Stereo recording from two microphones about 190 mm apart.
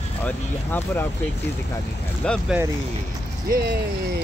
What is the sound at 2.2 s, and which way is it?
Speech, 5° left (ahead or behind).